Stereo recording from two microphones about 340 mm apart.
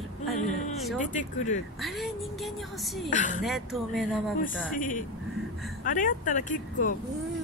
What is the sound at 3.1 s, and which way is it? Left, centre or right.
Speech, left.